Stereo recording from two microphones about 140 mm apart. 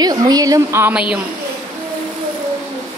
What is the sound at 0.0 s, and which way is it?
Speech, 25° right (ahead or behind).